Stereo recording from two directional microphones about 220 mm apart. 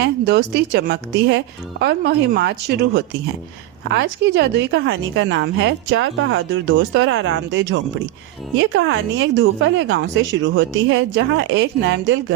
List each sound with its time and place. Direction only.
0.0 s a woman's voice: 50° right (ahead or behind)